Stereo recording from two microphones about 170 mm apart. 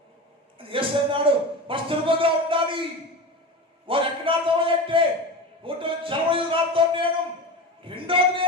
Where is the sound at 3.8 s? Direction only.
30° right (ahead or behind).